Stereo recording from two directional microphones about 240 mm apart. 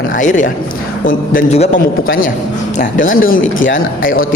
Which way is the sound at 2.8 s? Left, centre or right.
Left.